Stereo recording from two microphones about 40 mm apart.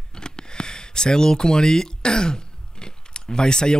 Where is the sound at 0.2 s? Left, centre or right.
Left.